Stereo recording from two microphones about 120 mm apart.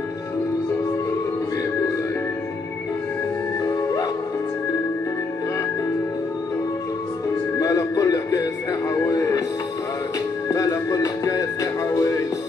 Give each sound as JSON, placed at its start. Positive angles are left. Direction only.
{"t": 3.6, "sound": "music", "side_deg": 30}
{"t": 7.5, "sound": "music", "side_deg": 25}
{"t": 10.5, "sound": "music", "side_deg": 30}